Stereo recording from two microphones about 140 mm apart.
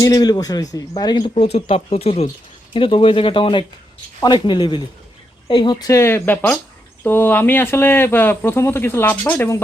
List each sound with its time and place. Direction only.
0.0 s a man's voice: 25° left (ahead or behind)
1.5 s speech: 45° left (ahead or behind)
5.9 s speech: 20° left (ahead or behind)